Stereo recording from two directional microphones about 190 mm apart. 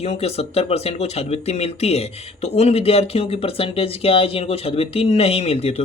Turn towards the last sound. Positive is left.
turn(degrees=30)  # may be behind; listen again after turning